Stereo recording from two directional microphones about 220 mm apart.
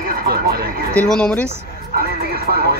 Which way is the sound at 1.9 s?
45° right (ahead or behind).